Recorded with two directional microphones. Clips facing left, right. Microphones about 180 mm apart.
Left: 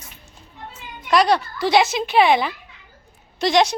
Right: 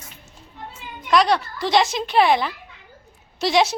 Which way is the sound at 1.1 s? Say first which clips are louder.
Left 1 dB; centre (ahead or behind).